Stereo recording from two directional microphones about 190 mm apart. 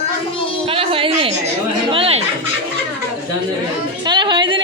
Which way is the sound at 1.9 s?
30° right (ahead or behind).